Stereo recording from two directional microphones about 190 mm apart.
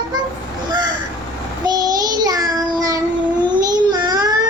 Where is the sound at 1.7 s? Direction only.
20° right (ahead or behind).